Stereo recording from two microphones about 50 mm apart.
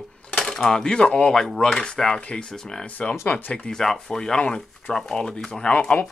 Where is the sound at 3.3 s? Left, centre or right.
Left.